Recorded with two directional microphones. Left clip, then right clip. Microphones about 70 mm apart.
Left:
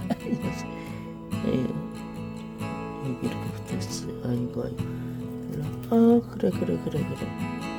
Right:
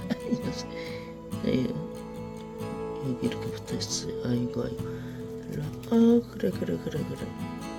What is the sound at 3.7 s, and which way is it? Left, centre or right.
Speech, centre.